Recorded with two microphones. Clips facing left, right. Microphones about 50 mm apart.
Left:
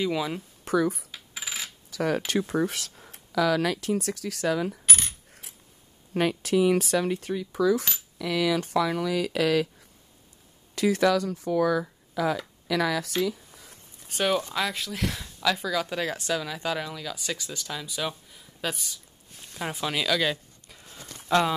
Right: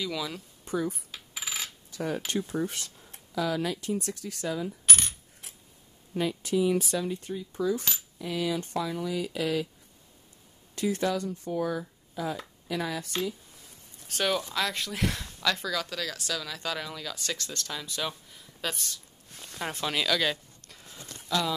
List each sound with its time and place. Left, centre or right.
0.0 s speech: left
0.7 s speech: left
2.0 s speech: left
6.1 s speech: left
10.7 s speech: left
14.0 s speech: centre
15.9 s speech: left; by 20.9 s centre
21.3 s speech: left